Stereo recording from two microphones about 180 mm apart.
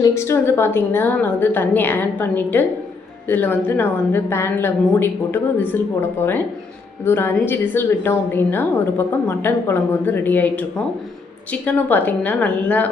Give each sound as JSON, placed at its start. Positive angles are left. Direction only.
{"t": 0.0, "sound": "a woman's voice", "side_deg": 15}